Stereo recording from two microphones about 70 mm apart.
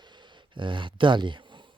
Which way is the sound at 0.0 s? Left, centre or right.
Right.